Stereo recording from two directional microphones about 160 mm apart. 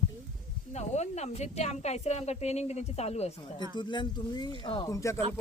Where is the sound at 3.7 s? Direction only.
30° left (ahead or behind).